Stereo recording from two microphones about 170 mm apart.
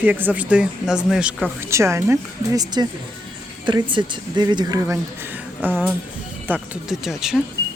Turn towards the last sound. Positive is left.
turn(degrees=-5)  # may be behind; listen again after turning